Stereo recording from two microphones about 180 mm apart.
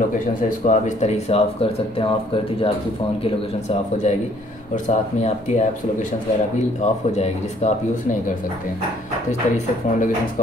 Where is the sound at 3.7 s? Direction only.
40° left (ahead or behind).